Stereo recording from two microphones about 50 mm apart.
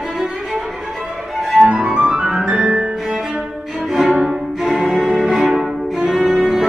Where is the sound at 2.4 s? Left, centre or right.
Right.